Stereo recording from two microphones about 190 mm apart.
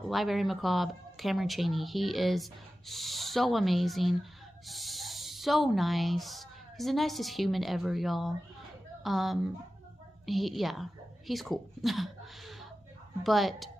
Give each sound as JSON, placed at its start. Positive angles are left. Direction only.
{"t": 0.1, "sound": "a woman's voice", "side_deg": 0}